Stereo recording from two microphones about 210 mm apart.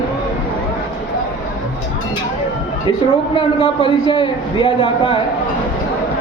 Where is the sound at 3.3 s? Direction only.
25° left (ahead or behind).